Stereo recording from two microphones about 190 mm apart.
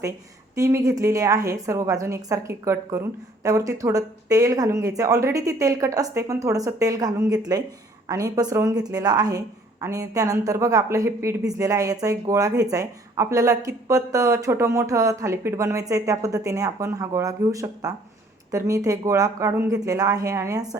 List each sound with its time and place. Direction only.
0.5 s a woman's voice: 15° right (ahead or behind)